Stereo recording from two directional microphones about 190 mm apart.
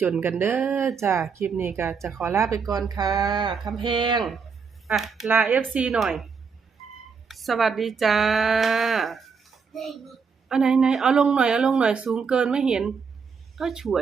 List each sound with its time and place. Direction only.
0.0 s speech: 10° right (ahead or behind)
4.9 s speech: centre (ahead or behind)
7.3 s speech: centre (ahead or behind)